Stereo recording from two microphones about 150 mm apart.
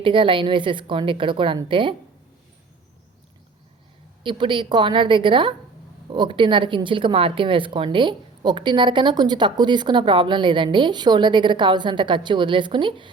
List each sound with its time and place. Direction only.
0.0 s speech: 35° right (ahead or behind)
4.2 s speech: 35° right (ahead or behind)